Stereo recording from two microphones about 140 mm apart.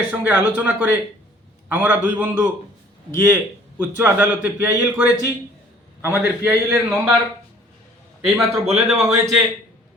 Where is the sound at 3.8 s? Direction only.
15° right (ahead or behind).